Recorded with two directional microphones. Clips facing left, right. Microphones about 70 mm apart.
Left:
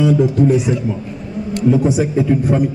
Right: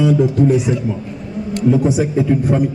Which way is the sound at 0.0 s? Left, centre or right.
Centre.